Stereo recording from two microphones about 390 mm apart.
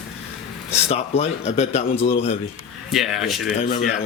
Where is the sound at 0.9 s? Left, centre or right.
Centre.